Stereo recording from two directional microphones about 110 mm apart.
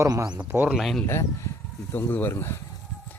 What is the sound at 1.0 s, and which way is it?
Speech, 25° left (ahead or behind).